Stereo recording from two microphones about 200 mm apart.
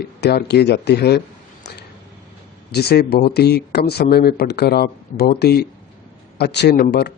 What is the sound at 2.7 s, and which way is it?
Speech, 55° left (ahead or behind).